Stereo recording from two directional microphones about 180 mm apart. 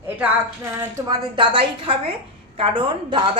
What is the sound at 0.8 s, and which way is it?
A woman's voice, 20° right (ahead or behind).